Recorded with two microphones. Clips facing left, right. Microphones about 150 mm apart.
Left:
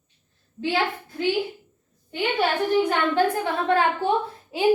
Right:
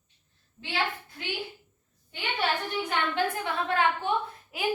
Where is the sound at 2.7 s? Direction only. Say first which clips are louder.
Left 8 dB; 40° left (ahead or behind).